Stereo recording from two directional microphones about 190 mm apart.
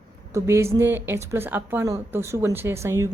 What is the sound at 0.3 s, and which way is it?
Speech, 15° right (ahead or behind).